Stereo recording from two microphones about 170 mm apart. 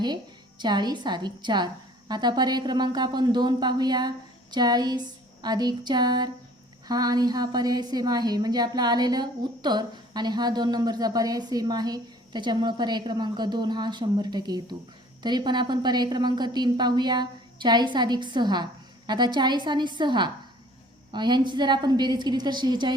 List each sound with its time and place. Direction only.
0.6 s a woman's voice: 25° right (ahead or behind)